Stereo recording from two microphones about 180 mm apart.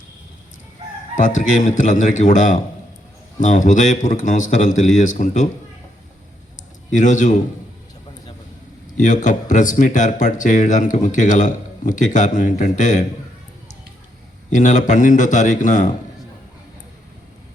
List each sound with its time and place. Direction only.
1.1 s speech: 45° left (ahead or behind)
6.9 s speech: 45° left (ahead or behind)
9.0 s speech: 45° left (ahead or behind)
14.5 s speech: 40° left (ahead or behind)